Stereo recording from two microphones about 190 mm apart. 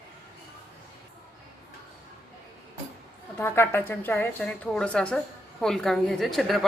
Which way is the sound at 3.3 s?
10° left (ahead or behind).